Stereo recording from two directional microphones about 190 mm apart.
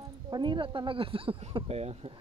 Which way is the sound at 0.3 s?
25° right (ahead or behind).